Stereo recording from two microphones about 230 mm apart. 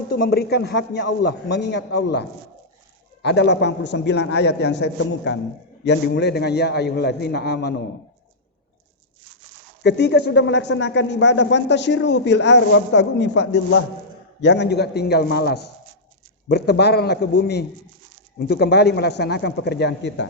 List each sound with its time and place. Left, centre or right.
0.2 s speech: left
9.8 s speech: left